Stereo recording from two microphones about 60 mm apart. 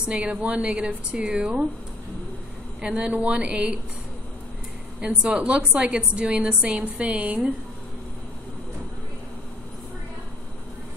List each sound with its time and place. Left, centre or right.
0.1 s a woman's voice: centre
2.8 s a woman's voice: right
5.0 s a woman's voice: centre